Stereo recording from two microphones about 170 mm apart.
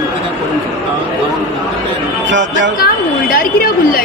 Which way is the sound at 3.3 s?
60° left (ahead or behind).